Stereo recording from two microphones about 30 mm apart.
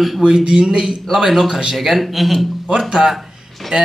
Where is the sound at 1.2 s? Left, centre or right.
Centre.